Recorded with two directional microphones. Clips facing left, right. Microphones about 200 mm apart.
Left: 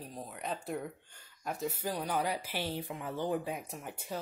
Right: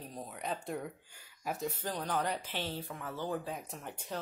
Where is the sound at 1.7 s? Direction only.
10° left (ahead or behind).